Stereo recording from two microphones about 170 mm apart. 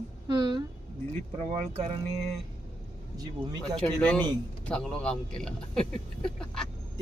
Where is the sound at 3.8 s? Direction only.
10° left (ahead or behind).